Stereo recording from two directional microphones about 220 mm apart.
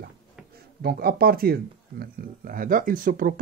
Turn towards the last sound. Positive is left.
turn(degrees=-40)  # may be behind; listen again after turning